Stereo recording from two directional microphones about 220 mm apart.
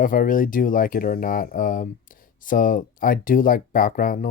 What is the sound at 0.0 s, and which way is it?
Speech, 40° left (ahead or behind).